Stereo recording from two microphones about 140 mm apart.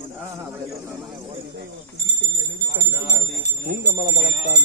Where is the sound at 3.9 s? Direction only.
90° right.